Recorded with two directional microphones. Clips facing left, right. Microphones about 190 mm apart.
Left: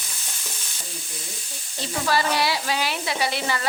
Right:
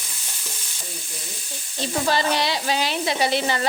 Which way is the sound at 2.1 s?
20° right (ahead or behind).